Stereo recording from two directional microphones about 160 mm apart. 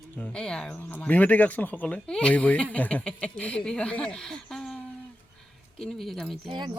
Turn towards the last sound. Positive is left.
turn(degrees=-30)  # may be behind; listen again after turning